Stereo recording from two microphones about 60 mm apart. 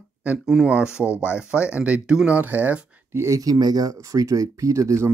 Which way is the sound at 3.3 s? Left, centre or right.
Right.